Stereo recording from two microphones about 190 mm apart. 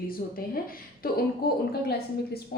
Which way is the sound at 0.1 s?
50° left (ahead or behind).